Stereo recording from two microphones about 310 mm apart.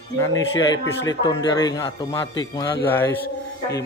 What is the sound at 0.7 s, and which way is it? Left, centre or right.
A man's voice, centre.